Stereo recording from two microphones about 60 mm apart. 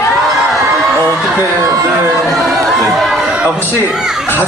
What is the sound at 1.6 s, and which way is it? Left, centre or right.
Speech, right.